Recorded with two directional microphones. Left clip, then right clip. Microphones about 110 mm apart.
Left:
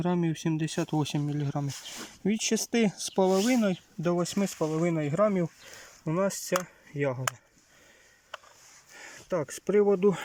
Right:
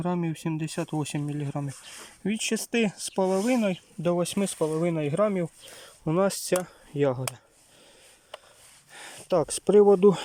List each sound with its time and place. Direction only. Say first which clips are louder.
0.0 s speech: left 1 dB; 5° right (ahead or behind)
6.9 s speech: right 4 dB; 15° right (ahead or behind)
8.9 s speech: right 6 dB; centre (ahead or behind)